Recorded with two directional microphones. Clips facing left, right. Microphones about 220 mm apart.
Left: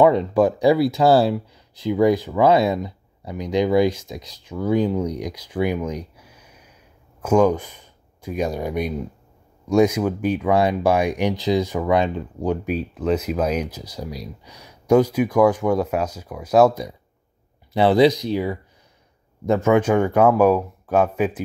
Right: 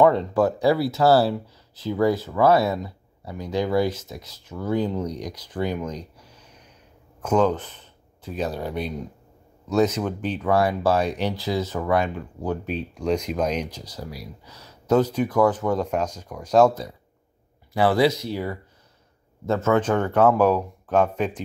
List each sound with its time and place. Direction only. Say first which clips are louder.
0.0 s speech: left 2 dB; 15° left (ahead or behind)
14.1 s speech: left 4 dB; 20° left (ahead or behind)
17.7 s speech: left 4 dB; 20° left (ahead or behind)